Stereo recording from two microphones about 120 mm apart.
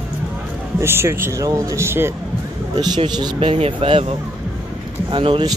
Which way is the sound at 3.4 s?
55° right (ahead or behind).